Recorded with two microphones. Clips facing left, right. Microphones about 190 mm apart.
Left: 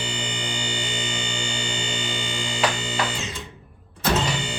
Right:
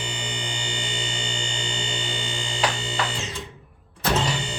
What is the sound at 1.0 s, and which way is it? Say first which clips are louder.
Fire alarm: left 2 dB; 30° right (ahead or behind).